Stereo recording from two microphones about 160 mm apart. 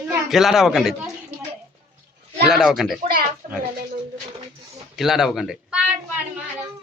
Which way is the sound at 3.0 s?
65° right (ahead or behind).